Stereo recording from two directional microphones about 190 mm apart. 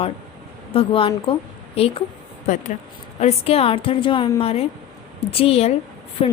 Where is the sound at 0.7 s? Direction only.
30° left (ahead or behind).